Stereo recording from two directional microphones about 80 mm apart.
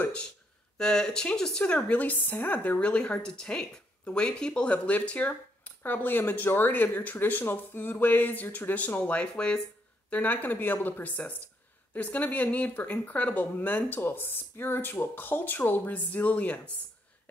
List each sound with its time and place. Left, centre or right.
0.7 s a woman's voice: centre